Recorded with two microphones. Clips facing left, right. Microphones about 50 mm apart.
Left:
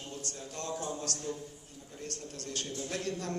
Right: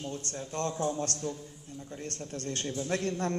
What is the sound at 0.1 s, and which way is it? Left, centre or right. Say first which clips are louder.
A man's voice: right 5 dB; right.